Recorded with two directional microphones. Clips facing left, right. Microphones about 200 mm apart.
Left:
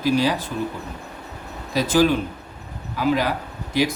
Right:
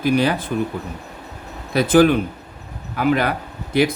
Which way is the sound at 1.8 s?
55° right (ahead or behind).